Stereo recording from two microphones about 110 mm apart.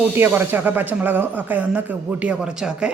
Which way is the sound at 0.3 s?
15° right (ahead or behind).